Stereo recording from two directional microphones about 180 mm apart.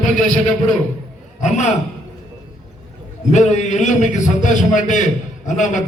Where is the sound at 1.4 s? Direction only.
40° left (ahead or behind).